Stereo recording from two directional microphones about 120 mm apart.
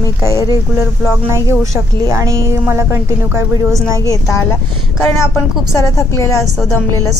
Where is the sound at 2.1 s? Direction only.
20° right (ahead or behind).